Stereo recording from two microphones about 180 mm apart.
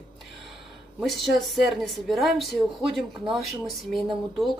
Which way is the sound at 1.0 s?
Centre (ahead or behind).